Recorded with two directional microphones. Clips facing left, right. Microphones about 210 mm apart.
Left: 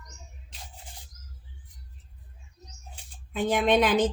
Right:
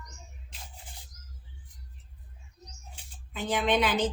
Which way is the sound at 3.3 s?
50° left (ahead or behind).